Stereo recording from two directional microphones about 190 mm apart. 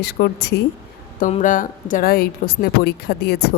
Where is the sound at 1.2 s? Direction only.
40° left (ahead or behind).